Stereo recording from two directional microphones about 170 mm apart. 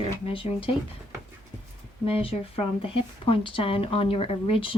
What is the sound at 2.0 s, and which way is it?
Speech, 35° left (ahead or behind).